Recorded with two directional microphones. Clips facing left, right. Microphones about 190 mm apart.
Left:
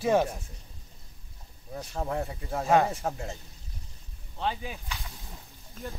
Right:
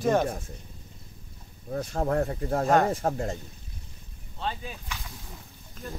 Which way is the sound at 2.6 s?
5° left (ahead or behind).